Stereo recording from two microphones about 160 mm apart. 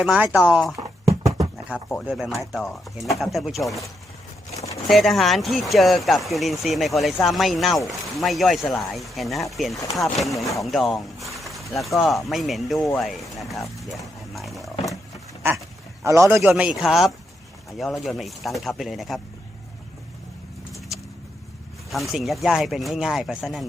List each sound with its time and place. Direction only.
0.0 s speech: 5° right (ahead or behind)
1.7 s speech: 10° right (ahead or behind)
4.9 s speech: centre (ahead or behind)
16.0 s speech: 15° right (ahead or behind)
16.4 s speech: 5° right (ahead or behind)
20.9 s vehicle: centre (ahead or behind)
21.8 s speech: centre (ahead or behind)